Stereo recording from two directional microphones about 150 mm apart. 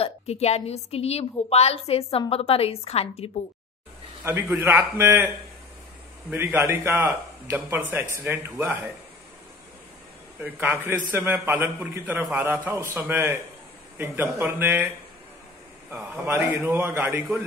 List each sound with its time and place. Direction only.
0.0 s a woman's voice: 45° left (ahead or behind)
4.2 s a man's voice: 10° right (ahead or behind)
6.3 s a man's voice: 15° right (ahead or behind)
10.4 s a man's voice: 10° right (ahead or behind)
15.9 s a man's voice: 10° right (ahead or behind)